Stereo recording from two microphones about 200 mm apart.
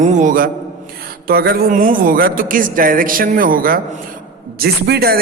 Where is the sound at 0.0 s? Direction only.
40° right (ahead or behind).